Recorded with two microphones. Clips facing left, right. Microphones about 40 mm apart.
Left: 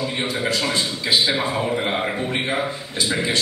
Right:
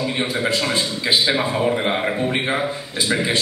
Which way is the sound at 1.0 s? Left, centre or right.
Centre.